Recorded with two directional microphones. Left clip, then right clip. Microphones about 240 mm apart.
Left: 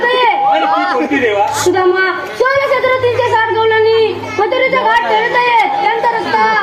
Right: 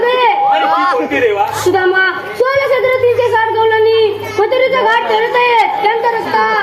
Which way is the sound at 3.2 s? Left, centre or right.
Right.